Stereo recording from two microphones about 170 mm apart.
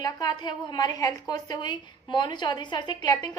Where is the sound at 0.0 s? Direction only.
25° left (ahead or behind).